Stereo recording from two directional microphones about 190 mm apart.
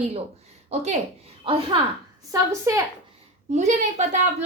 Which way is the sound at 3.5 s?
40° right (ahead or behind).